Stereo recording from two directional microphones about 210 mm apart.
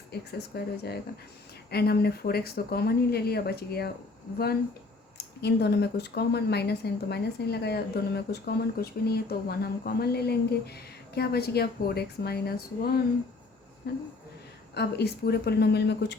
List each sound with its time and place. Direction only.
0.1 s speech: 50° left (ahead or behind)
5.1 s speech: 50° left (ahead or behind)